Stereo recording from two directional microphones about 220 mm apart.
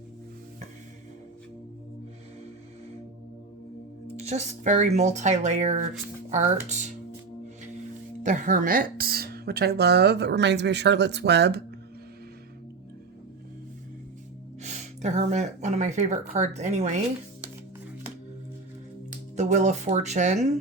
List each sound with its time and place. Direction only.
4.3 s speech: 30° right (ahead or behind)
8.2 s speech: 35° right (ahead or behind)
14.6 s speech: 30° right (ahead or behind)
19.4 s speech: 30° right (ahead or behind)